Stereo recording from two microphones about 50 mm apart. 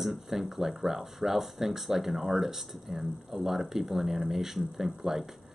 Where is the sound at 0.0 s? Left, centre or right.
Centre.